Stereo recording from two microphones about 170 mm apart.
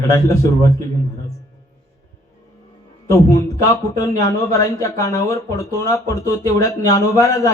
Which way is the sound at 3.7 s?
20° left (ahead or behind).